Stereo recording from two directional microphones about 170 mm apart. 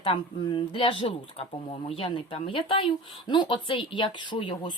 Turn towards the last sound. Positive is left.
turn(degrees=30)  # may be behind; listen again after turning